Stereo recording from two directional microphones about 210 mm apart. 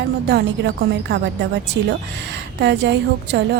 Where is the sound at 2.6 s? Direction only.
55° right (ahead or behind).